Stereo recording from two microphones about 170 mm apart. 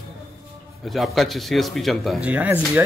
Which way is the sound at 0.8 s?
Centre (ahead or behind).